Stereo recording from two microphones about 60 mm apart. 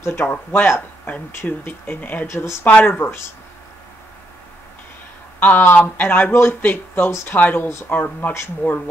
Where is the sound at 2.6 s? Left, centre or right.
Left.